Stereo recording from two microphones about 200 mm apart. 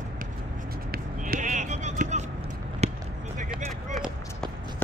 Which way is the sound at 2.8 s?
30° right (ahead or behind).